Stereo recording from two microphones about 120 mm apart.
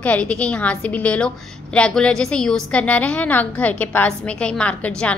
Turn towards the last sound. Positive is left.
turn(degrees=10)  # may be behind; listen again after turning